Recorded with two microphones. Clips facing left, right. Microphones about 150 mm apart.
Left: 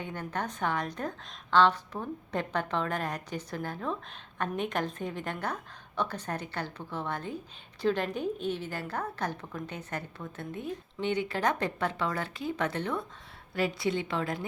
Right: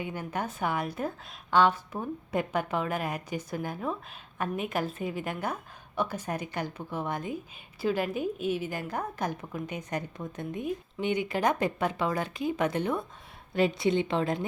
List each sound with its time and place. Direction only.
0.0 s a woman's voice: 10° right (ahead or behind)